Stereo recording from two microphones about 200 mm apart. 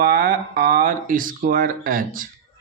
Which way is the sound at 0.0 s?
45° right (ahead or behind).